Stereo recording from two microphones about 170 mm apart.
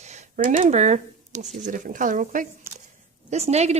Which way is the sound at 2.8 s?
40° right (ahead or behind).